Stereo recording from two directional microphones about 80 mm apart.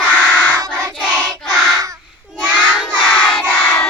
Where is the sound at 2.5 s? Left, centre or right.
Centre.